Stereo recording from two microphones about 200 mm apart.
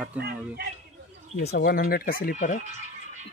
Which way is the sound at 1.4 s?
50° left (ahead or behind).